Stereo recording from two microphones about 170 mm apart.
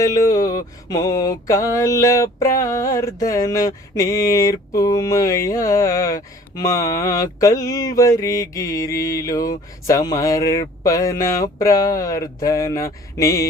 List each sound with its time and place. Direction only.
0.0 s mantra: 20° left (ahead or behind)